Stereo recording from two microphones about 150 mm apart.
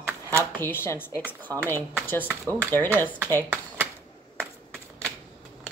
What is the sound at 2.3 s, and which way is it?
Speech, 15° right (ahead or behind).